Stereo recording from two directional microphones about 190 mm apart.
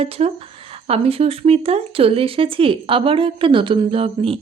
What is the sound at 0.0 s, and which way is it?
A woman's voice, 30° right (ahead or behind).